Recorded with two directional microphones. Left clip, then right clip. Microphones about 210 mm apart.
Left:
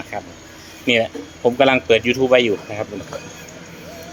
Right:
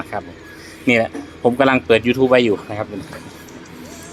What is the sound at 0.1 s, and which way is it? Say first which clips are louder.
A man's voice: right 2 dB; 15° right (ahead or behind).